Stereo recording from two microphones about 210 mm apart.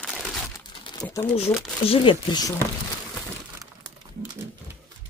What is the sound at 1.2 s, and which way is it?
Speech, 30° left (ahead or behind).